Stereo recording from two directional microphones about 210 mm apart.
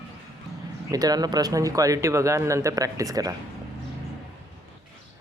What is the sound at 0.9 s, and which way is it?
A man's voice, 20° right (ahead or behind).